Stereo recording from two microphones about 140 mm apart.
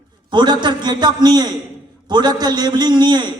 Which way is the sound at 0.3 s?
35° right (ahead or behind).